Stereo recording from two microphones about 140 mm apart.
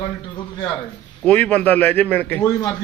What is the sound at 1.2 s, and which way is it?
A man's voice, 10° left (ahead or behind).